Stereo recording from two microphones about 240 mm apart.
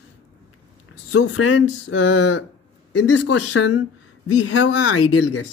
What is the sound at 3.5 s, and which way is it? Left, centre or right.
Speech, left.